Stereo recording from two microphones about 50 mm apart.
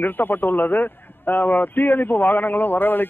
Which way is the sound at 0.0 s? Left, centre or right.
Left.